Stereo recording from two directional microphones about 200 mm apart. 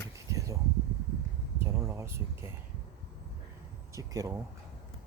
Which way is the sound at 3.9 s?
15° right (ahead or behind).